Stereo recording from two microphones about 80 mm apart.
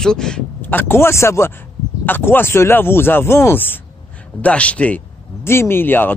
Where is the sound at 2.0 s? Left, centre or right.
Left.